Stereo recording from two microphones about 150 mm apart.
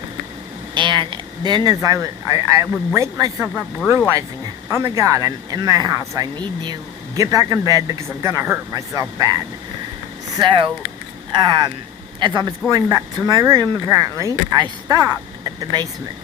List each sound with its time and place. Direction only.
0.7 s speech: 30° right (ahead or behind)
4.7 s speech: 20° right (ahead or behind)
10.3 s speech: 30° right (ahead or behind)